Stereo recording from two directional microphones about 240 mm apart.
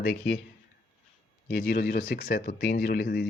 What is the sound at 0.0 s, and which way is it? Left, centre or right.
Speech, left.